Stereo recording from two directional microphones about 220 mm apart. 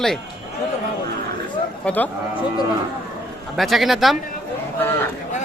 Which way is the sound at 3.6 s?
Centre (ahead or behind).